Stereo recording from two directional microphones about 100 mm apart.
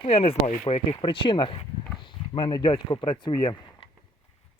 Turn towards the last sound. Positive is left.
turn(degrees=50)  # may be behind; listen again after turning